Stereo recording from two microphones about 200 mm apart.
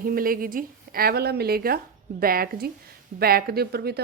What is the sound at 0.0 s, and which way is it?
A woman's voice, 45° right (ahead or behind).